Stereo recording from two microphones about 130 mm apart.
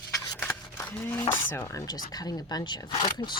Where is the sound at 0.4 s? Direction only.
15° left (ahead or behind).